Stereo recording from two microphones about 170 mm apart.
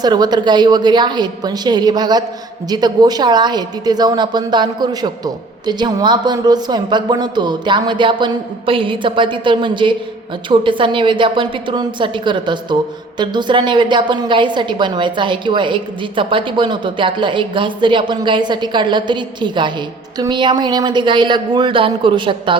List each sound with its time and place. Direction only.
0.0 s a woman's voice: 25° right (ahead or behind)